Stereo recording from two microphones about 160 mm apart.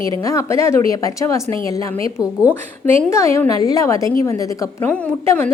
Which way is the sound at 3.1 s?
15° left (ahead or behind).